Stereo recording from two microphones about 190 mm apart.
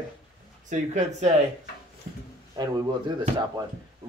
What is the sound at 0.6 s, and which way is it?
Speech, 40° right (ahead or behind).